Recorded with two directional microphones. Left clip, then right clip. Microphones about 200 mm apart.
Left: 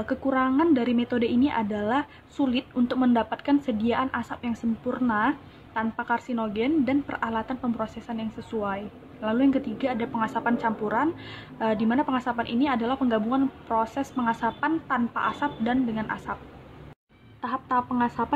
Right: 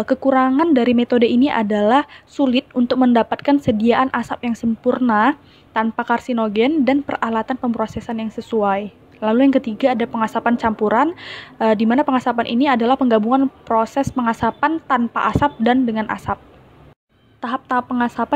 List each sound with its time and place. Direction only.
0.0 s a woman's voice: 40° right (ahead or behind)
17.4 s a woman's voice: 40° right (ahead or behind)